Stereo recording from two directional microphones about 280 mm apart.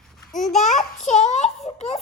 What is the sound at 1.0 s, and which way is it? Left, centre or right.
Speech, left.